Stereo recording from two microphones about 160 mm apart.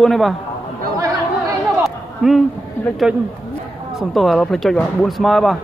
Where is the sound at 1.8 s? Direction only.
Centre (ahead or behind).